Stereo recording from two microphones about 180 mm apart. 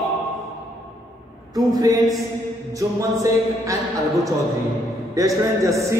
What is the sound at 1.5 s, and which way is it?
A man's voice, 20° right (ahead or behind).